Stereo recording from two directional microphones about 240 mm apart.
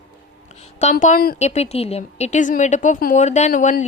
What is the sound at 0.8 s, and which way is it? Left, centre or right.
A woman's voice, left.